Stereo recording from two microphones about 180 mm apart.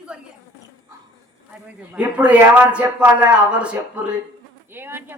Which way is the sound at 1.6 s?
5° right (ahead or behind).